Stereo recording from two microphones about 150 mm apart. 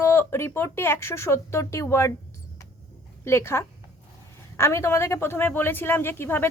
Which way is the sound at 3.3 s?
15° left (ahead or behind).